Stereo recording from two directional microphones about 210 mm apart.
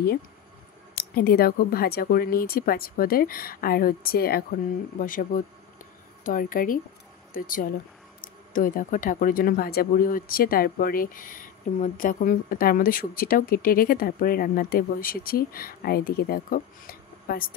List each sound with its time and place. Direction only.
0.9 s a woman's voice: 45° left (ahead or behind)